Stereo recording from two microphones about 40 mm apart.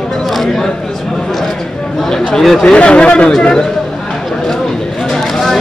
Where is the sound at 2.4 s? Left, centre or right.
Centre.